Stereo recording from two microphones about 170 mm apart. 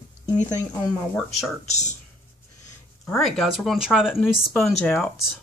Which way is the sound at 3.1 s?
Centre (ahead or behind).